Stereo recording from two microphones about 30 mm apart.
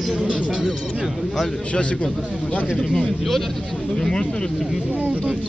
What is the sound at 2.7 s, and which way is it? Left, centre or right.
Speech, centre.